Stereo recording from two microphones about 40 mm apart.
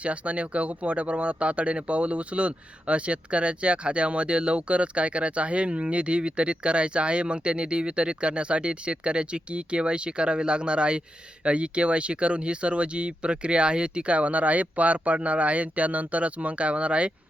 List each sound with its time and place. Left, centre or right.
0.0 s speech: right